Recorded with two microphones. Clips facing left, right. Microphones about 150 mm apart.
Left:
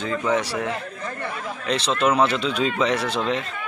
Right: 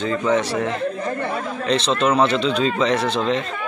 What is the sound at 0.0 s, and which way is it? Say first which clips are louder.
Speech: right 3 dB; 5° left (ahead or behind).